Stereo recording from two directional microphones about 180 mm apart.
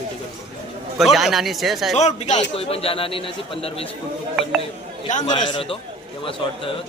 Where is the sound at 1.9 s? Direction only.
40° left (ahead or behind).